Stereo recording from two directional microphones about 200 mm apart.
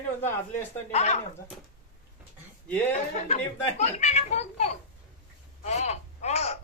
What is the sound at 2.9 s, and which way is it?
A child's voice, 35° left (ahead or behind).